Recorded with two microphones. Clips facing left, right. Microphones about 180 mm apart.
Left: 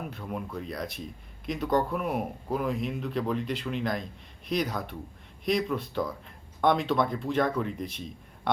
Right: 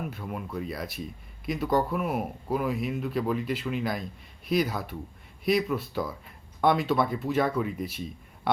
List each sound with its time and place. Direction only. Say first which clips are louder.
0.0 s speech: even; 5° right (ahead or behind)